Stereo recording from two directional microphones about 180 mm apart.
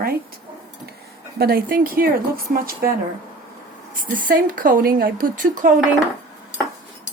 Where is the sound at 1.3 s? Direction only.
55° right (ahead or behind).